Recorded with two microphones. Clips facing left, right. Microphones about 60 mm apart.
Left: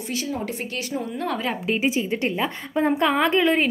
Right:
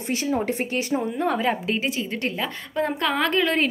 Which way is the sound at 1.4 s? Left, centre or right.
Centre.